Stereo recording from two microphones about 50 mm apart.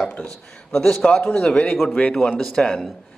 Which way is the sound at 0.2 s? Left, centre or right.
Left.